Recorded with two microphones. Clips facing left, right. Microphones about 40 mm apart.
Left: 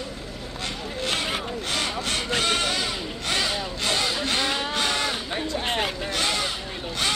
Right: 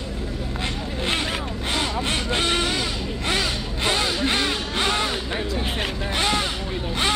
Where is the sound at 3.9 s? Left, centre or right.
Right.